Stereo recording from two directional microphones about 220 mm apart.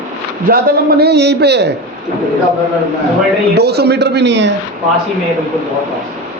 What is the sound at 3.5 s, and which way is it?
Speech, 50° right (ahead or behind).